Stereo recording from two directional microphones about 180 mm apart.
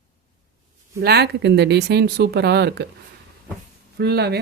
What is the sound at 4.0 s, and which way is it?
Speech, 60° right (ahead or behind).